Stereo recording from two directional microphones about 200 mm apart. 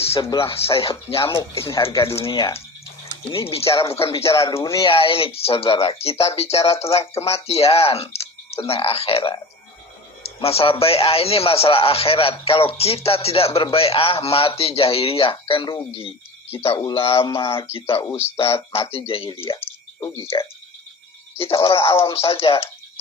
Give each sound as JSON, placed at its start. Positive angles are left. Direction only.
{"t": 0.1, "sound": "a man's voice", "side_deg": 25}
{"t": 1.2, "sound": "speech", "side_deg": 15}
{"t": 2.1, "sound": "a man's voice", "side_deg": 25}
{"t": 4.0, "sound": "a man's voice", "side_deg": 15}
{"t": 19.5, "sound": "a sound", "side_deg": 10}
{"t": 21.3, "sound": "a man's voice", "side_deg": 25}